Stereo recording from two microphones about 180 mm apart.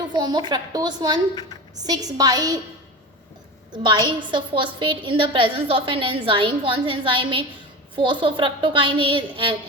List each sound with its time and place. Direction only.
0.1 s a woman's voice: 25° right (ahead or behind)
3.7 s a woman's voice: 25° right (ahead or behind)